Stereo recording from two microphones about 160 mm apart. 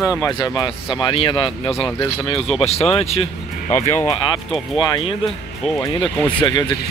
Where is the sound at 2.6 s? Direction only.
40° left (ahead or behind).